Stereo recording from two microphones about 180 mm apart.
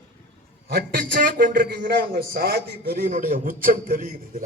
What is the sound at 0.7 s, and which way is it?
A man's voice, 60° right (ahead or behind).